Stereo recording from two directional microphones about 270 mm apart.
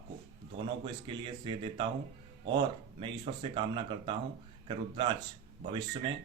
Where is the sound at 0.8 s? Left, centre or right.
Centre.